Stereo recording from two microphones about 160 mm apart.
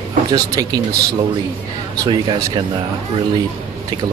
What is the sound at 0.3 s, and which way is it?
Speech, 25° right (ahead or behind).